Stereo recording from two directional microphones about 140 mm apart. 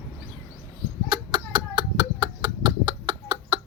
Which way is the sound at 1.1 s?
30° right (ahead or behind).